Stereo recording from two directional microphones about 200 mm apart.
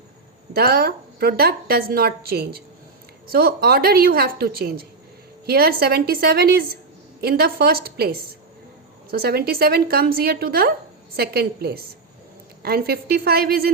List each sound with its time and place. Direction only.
0.5 s a woman's voice: 50° right (ahead or behind)